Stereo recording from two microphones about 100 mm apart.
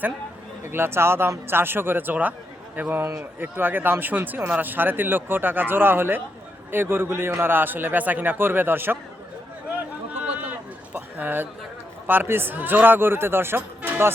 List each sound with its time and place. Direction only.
0.6 s speech: 25° right (ahead or behind)
10.9 s a sound: 20° right (ahead or behind)
12.0 s speech: 20° right (ahead or behind)